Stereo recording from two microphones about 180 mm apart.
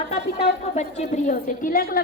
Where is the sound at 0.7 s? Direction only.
40° left (ahead or behind).